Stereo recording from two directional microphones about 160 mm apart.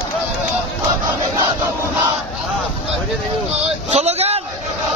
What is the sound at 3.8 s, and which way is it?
Vehicle, 45° right (ahead or behind).